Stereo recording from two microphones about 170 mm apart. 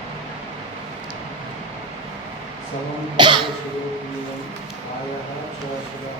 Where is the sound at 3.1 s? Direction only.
30° right (ahead or behind).